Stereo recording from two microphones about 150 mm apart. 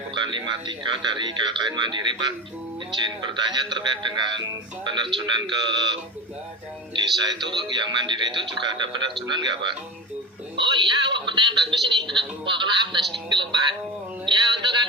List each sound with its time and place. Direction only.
0.1 s a man's voice: 30° right (ahead or behind)
7.2 s speech: 30° right (ahead or behind)
10.6 s speech: 35° right (ahead or behind)